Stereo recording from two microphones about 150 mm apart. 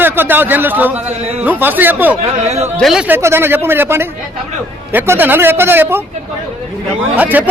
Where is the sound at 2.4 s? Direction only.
45° right (ahead or behind).